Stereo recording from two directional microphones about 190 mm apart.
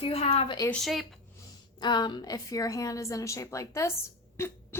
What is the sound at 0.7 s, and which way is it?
Speech, centre (ahead or behind).